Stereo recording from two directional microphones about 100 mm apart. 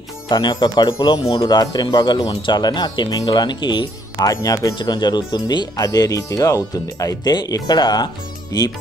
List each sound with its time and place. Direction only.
0.3 s speech: 45° left (ahead or behind)